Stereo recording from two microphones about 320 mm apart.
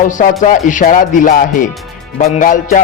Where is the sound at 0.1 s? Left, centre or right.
Left.